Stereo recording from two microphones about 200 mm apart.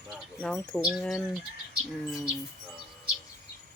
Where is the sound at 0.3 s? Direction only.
5° left (ahead or behind).